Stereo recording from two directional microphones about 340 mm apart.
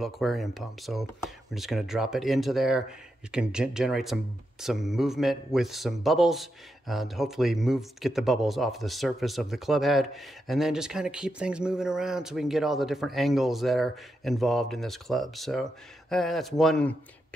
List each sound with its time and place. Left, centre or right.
0.0 s speech: centre